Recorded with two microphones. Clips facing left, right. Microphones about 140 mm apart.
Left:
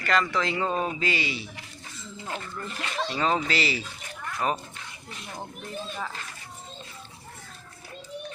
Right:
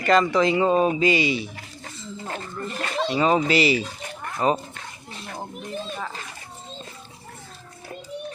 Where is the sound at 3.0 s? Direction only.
15° right (ahead or behind).